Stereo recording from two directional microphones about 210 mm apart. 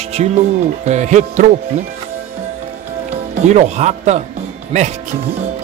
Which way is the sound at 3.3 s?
30° right (ahead or behind).